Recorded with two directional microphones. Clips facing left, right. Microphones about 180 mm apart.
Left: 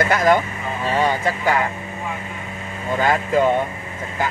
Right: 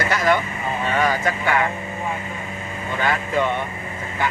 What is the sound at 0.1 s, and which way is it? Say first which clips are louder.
Vehicle: left 2 dB; 45° left (ahead or behind).